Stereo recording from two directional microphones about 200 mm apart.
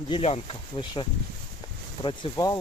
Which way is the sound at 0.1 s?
30° left (ahead or behind).